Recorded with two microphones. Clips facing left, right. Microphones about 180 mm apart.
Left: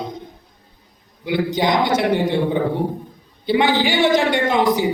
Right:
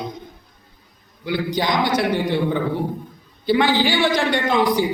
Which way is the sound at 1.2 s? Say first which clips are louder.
Left 3 dB; 20° left (ahead or behind).